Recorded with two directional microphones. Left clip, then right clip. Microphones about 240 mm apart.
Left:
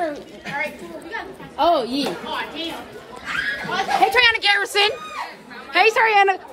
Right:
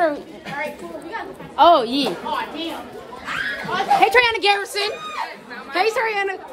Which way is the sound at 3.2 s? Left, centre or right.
Right.